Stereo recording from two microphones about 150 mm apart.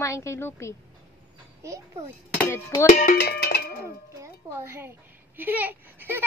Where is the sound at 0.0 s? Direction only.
20° left (ahead or behind).